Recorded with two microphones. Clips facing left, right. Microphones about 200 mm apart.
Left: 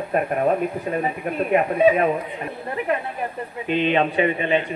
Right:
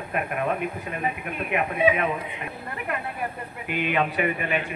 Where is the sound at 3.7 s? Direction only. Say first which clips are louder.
Left 5 dB; 25° left (ahead or behind).